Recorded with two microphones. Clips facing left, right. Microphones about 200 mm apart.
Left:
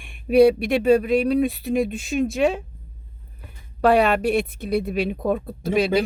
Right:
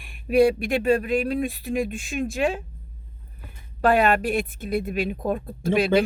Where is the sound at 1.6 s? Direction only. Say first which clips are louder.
Left 4 dB; centre (ahead or behind).